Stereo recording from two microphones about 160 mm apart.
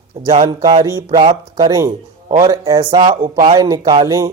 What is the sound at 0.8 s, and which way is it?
A man's voice, 20° right (ahead or behind).